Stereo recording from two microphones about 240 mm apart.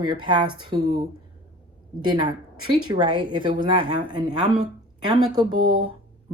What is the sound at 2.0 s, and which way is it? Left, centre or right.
Speech, centre.